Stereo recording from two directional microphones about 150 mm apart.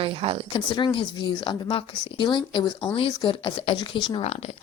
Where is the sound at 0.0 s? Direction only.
40° right (ahead or behind).